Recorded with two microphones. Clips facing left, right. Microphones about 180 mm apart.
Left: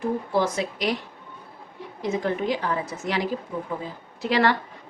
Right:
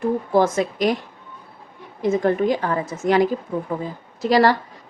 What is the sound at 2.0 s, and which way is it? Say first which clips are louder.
A woman's voice: right 7 dB; 50° right (ahead or behind).